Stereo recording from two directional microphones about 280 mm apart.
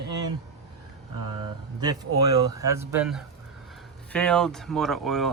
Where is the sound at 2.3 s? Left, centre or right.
Centre.